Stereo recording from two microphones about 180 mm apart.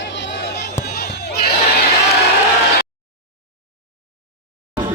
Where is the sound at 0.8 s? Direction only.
60° left (ahead or behind).